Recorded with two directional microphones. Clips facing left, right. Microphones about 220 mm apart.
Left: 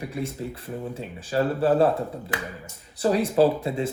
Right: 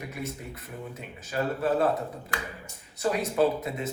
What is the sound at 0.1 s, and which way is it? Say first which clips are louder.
Speech: left 6 dB; 30° left (ahead or behind).